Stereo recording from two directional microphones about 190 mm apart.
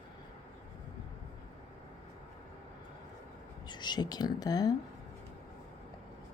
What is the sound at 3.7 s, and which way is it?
Speech, 25° left (ahead or behind).